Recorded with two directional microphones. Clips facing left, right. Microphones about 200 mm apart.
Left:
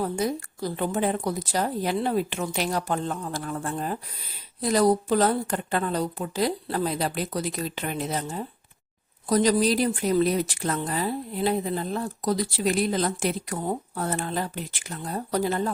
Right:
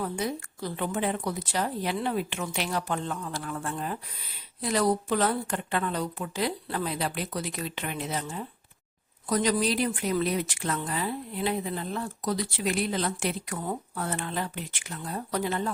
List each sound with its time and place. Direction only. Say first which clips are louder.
0.0 s a woman's voice: left 4 dB; 40° left (ahead or behind)